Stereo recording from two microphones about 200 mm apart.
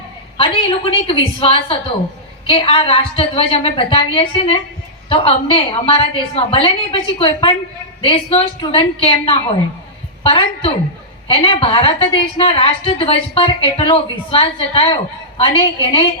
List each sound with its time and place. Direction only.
0.3 s a woman's voice: 30° left (ahead or behind)